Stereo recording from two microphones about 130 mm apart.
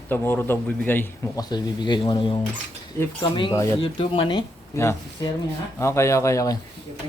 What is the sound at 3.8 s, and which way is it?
Speech, 40° left (ahead or behind).